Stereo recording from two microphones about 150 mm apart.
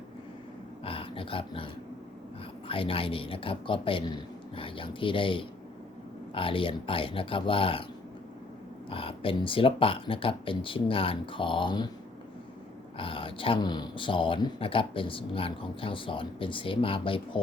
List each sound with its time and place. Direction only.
0.9 s dog: 35° left (ahead or behind)
2.6 s speech: 35° left (ahead or behind)
8.9 s speech: 35° left (ahead or behind)
13.0 s speech: 35° left (ahead or behind)